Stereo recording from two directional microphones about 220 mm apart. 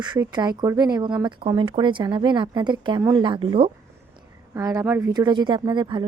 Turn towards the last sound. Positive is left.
turn(degrees=-20)  # may be behind; listen again after turning